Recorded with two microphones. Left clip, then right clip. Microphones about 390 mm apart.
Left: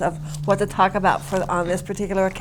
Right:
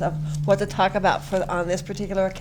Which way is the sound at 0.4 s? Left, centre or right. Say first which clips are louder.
Left 2 dB; centre.